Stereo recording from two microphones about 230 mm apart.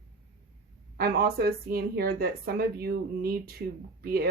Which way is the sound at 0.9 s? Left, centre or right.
Right.